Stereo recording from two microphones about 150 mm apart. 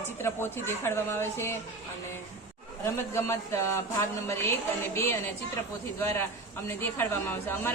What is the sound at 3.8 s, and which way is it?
Music, 20° left (ahead or behind).